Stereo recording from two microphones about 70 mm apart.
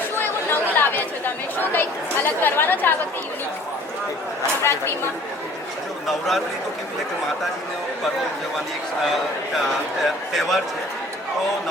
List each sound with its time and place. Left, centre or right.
0.2 s chatter: left
6.1 s a man's voice: centre
10.0 s a man's voice: centre